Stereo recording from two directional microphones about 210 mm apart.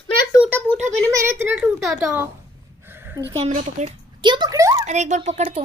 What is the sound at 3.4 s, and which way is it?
Speech, 35° right (ahead or behind).